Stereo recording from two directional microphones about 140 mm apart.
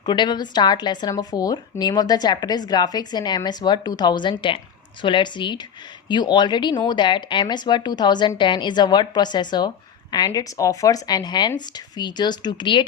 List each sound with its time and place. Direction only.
0.0 s a woman's voice: 30° left (ahead or behind)